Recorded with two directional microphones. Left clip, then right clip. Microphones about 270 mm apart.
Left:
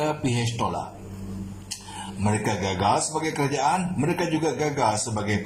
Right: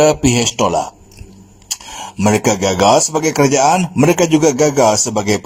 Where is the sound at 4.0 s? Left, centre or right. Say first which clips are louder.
Right 13 dB; right.